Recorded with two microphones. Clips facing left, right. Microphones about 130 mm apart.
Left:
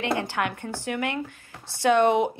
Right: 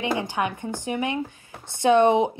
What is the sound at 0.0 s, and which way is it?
A woman's voice, 15° right (ahead or behind).